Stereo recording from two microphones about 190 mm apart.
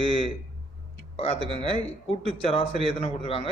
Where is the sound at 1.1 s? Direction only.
35° left (ahead or behind).